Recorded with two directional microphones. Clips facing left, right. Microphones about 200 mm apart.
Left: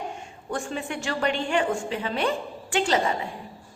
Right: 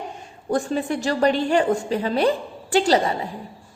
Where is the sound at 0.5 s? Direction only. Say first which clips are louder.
Right 8 dB; 35° right (ahead or behind).